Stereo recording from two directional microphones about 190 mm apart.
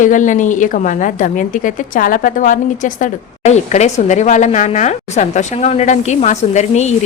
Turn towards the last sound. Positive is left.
turn(degrees=35)  # may be behind; listen again after turning